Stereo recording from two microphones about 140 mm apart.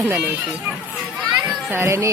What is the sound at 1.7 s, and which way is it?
Speech, 20° right (ahead or behind).